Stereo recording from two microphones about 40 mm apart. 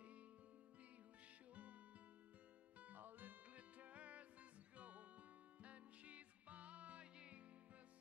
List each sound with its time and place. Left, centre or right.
1.5 s music: right
2.8 s music: right
3.5 s music: right